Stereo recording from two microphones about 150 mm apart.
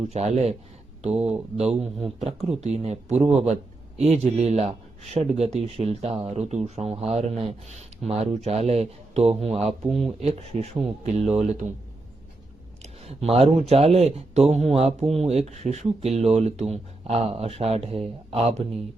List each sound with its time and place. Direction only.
0.0 s speech: 45° right (ahead or behind)
12.8 s a sound: 45° right (ahead or behind)
13.3 s speech: 45° right (ahead or behind)